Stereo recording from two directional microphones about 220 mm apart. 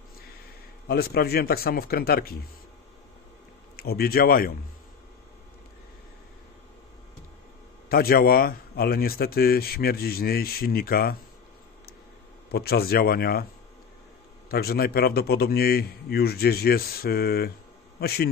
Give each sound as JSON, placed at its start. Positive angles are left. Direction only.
{"t": 0.8, "sound": "a man's voice", "side_deg": 45}
{"t": 3.7, "sound": "a man's voice", "side_deg": 45}
{"t": 7.9, "sound": "a man's voice", "side_deg": 45}
{"t": 12.4, "sound": "a man's voice", "side_deg": 45}
{"t": 14.5, "sound": "a man's voice", "side_deg": 45}